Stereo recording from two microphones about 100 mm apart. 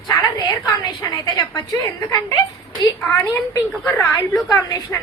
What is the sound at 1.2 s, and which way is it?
Speech, 45° left (ahead or behind).